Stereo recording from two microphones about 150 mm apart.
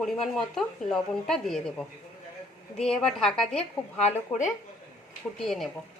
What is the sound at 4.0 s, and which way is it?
Speech, 50° left (ahead or behind).